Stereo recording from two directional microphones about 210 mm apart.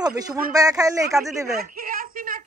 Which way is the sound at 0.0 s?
20° right (ahead or behind).